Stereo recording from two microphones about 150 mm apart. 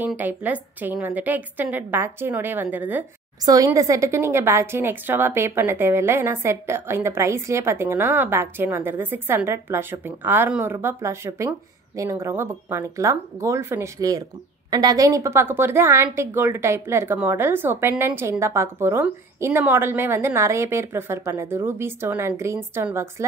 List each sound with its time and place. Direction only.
0.0 s a woman's voice: 10° right (ahead or behind)
3.4 s a woman's voice: 20° right (ahead or behind)